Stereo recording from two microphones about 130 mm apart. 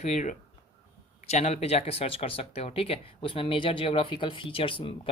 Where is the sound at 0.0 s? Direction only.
65° left (ahead or behind).